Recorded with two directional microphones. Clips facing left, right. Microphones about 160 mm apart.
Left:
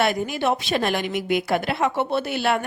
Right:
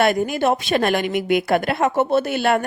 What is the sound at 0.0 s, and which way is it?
A woman's voice, 50° right (ahead or behind).